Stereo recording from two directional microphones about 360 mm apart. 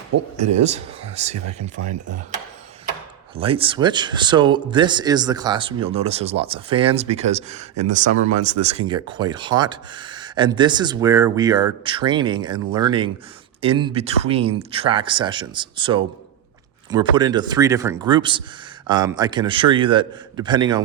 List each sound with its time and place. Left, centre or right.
0.1 s speech: right
0.5 s speech: centre
1.9 s speech: right
3.3 s speech: centre